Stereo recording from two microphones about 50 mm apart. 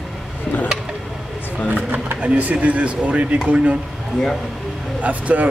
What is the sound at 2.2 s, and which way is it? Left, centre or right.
Speech, right.